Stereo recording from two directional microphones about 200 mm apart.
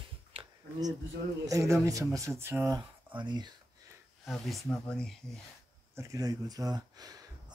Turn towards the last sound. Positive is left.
turn(degrees=-20)  # may be behind; listen again after turning